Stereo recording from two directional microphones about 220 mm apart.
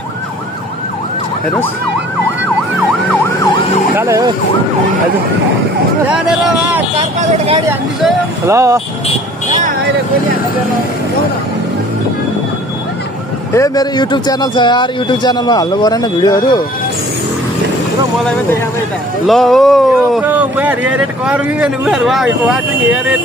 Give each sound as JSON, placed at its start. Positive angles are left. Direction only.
{"t": 3.9, "sound": "speech", "side_deg": -10}
{"t": 6.0, "sound": "speech", "side_deg": -5}
{"t": 7.0, "sound": "speech", "side_deg": -30}
{"t": 8.5, "sound": "speech", "side_deg": -15}
{"t": 13.5, "sound": "speech", "side_deg": 15}
{"t": 19.2, "sound": "speech", "side_deg": 0}